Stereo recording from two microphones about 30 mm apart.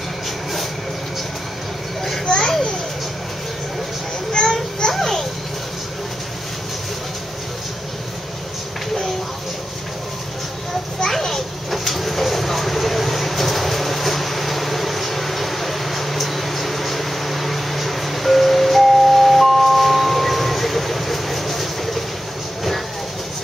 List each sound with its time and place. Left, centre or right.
2.3 s children playing: centre
4.3 s a sound: left
4.9 s children playing: centre
11.1 s children playing: centre